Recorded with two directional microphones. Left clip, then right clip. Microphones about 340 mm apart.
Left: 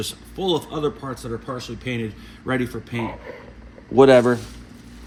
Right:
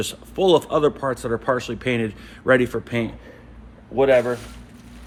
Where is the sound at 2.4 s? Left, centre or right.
Centre.